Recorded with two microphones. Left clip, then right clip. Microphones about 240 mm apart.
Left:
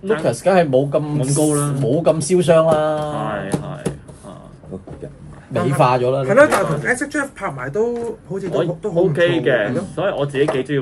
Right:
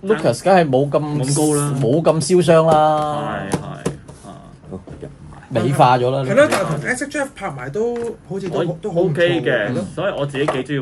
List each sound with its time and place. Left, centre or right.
0.2 s speech: right
1.1 s speech: centre
1.9 s speech: right
3.1 s music: centre
5.8 s speech: right
6.2 s speech: centre